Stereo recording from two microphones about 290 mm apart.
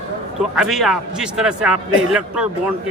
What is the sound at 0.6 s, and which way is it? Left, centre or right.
A man's voice, centre.